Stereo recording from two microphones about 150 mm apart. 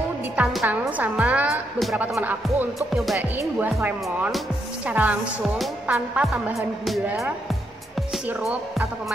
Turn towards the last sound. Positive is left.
turn(degrees=-15)  # may be behind; listen again after turning